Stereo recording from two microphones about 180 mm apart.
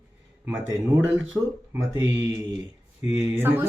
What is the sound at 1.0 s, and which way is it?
Speech, 10° right (ahead or behind).